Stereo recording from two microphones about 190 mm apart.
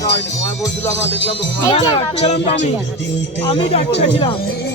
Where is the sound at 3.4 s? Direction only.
30° left (ahead or behind).